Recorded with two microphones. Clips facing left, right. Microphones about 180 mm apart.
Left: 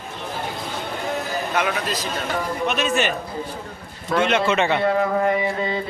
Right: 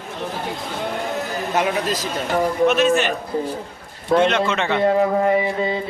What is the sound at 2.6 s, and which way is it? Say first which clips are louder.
Speech: right 8 dB; centre (ahead or behind).